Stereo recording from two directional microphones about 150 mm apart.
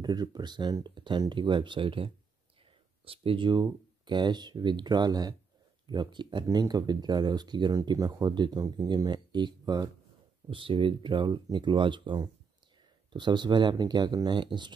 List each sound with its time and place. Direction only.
0.0 s speech: 25° right (ahead or behind)